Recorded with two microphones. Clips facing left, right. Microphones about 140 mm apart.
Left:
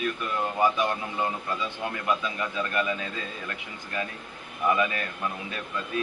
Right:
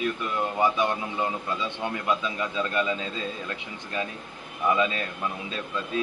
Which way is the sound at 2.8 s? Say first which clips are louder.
Right 1 dB; 20° right (ahead or behind).